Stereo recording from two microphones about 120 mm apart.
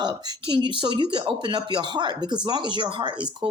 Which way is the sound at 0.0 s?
40° right (ahead or behind).